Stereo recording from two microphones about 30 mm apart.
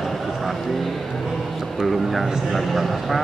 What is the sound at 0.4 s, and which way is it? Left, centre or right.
Vehicle, centre.